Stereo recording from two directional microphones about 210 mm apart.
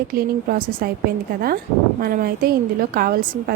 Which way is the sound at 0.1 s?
45° right (ahead or behind).